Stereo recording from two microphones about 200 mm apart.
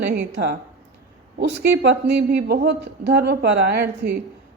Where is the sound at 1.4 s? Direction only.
60° right (ahead or behind).